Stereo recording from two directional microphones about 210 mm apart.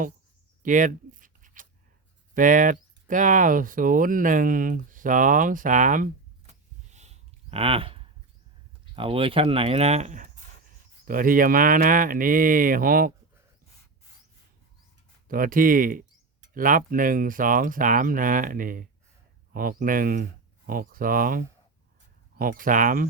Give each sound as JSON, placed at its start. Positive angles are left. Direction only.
{"t": 0.6, "sound": "writing", "side_deg": -40}
{"t": 2.3, "sound": "speech", "side_deg": -40}
{"t": 6.9, "sound": "a sound", "side_deg": -30}
{"t": 9.0, "sound": "speech", "side_deg": -25}
{"t": 15.3, "sound": "speech", "side_deg": -40}